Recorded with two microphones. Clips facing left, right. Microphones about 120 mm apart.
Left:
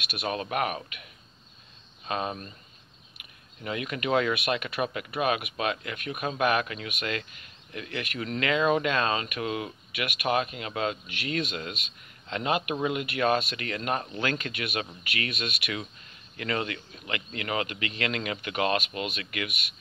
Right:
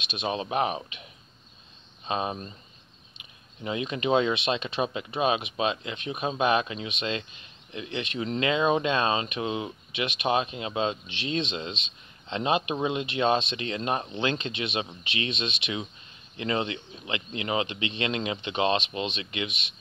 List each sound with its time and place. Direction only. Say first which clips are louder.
0.0 s speech: right 1 dB; 20° right (ahead or behind)
2.0 s speech: right 2 dB; 20° right (ahead or behind)